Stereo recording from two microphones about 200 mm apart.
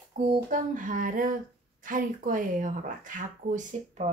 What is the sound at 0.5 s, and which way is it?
A woman's voice, 40° right (ahead or behind).